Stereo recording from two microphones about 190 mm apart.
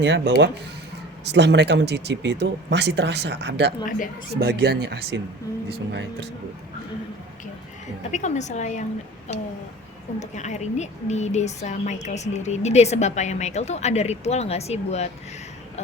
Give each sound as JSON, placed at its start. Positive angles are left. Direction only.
{"t": 0.0, "sound": "speech", "side_deg": -70}
{"t": 8.1, "sound": "speech", "side_deg": 40}